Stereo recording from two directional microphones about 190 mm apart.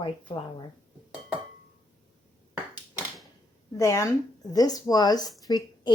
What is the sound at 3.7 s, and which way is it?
A woman's voice, 15° left (ahead or behind).